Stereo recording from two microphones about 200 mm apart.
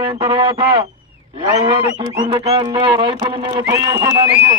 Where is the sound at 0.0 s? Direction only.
25° right (ahead or behind).